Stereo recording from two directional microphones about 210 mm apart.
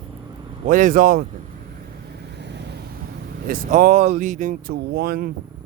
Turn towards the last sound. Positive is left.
turn(degrees=-50)  # may be behind; listen again after turning